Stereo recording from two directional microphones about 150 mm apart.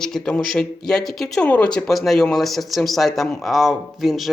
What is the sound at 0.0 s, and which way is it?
Speech, 5° left (ahead or behind).